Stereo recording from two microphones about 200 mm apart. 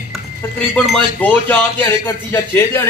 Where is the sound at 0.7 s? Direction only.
5° left (ahead or behind).